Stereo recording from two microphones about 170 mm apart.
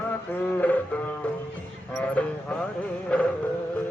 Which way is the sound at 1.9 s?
5° left (ahead or behind).